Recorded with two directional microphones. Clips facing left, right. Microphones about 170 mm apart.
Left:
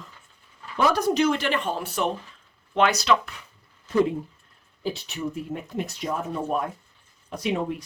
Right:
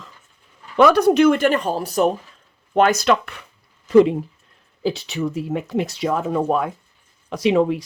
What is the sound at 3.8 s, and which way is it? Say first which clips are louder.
Speech: right 9 dB; 90° right.